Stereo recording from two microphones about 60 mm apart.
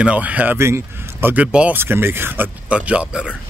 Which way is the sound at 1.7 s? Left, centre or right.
Right.